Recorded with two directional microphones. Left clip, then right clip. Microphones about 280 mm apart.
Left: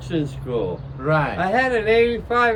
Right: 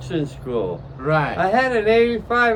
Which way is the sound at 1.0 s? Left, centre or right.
Centre.